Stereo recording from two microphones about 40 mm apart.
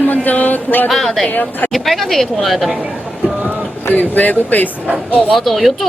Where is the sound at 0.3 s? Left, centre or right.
Left.